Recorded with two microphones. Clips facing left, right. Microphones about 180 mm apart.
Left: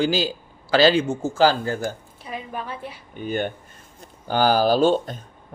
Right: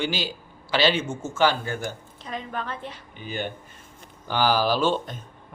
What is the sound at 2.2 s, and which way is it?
Speech, 10° left (ahead or behind).